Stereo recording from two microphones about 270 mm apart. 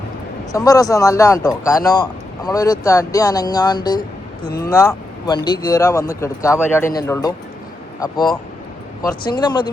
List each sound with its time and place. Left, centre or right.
0.5 s speech: centre